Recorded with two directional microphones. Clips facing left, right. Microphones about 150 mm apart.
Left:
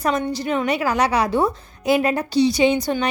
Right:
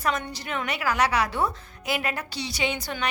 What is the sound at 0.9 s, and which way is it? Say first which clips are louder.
A woman's voice: left 2 dB; 20° left (ahead or behind).